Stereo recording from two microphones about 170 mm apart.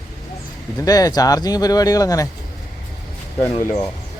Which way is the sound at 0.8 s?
20° left (ahead or behind).